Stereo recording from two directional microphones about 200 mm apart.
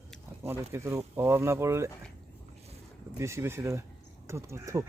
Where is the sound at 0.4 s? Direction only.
15° right (ahead or behind).